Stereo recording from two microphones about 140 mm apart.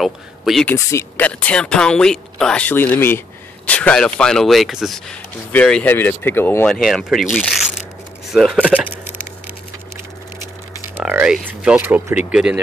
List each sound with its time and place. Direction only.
0.0 s speech: centre (ahead or behind)
0.7 s speech: 15° left (ahead or behind); by 8.7 s centre (ahead or behind)
8.7 s a sound: 15° right (ahead or behind)
11.0 s speech: 10° right (ahead or behind)